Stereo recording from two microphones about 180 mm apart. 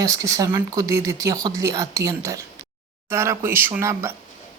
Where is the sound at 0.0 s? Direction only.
15° right (ahead or behind).